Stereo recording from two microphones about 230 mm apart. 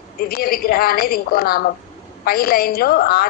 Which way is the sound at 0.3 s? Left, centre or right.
Left.